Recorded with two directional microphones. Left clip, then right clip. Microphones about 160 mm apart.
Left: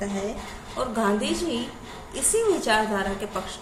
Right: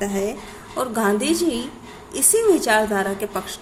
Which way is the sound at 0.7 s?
45° right (ahead or behind).